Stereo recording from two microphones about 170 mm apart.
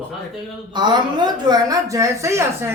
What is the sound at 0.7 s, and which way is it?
A woman's voice, 25° right (ahead or behind).